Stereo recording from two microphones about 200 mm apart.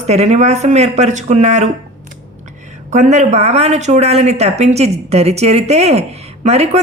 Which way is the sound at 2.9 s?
35° right (ahead or behind).